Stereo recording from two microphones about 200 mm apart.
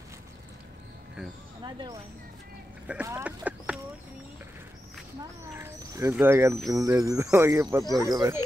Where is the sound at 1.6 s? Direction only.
20° right (ahead or behind).